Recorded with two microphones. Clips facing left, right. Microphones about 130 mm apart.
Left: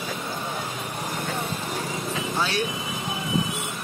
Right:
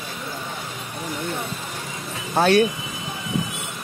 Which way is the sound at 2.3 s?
55° right (ahead or behind).